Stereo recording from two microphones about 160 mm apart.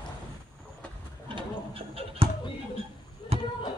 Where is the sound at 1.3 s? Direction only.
35° right (ahead or behind).